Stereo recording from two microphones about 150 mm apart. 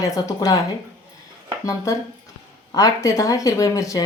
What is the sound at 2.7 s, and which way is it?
Speech, 20° left (ahead or behind).